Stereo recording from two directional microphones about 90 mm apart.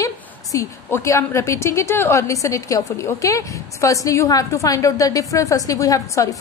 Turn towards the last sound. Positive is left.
turn(degrees=40)  # may be behind; listen again after turning